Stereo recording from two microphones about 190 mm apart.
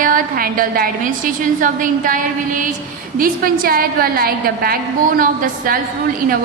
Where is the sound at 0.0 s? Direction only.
45° right (ahead or behind).